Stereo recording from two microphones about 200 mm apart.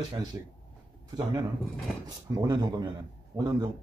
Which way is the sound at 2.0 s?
20° right (ahead or behind).